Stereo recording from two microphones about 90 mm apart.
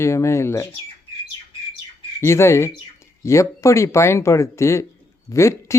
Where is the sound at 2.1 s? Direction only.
30° left (ahead or behind).